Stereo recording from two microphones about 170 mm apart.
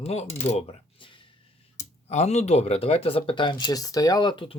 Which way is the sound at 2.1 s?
40° left (ahead or behind).